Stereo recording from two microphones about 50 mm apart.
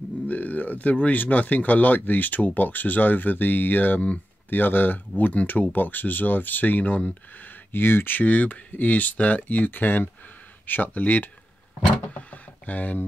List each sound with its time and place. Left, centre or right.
0.3 s speech: left
7.7 s speech: left
12.1 s a sound: left